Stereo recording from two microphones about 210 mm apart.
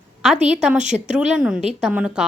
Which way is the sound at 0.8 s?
35° right (ahead or behind).